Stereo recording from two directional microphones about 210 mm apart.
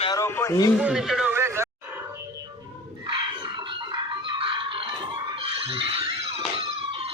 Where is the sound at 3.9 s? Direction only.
20° right (ahead or behind).